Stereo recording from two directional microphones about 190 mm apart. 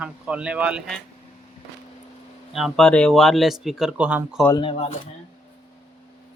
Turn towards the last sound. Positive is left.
turn(degrees=30)  # may be behind; listen again after turning